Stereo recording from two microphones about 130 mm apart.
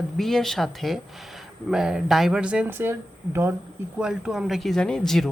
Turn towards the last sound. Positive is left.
turn(degrees=5)  # may be behind; listen again after turning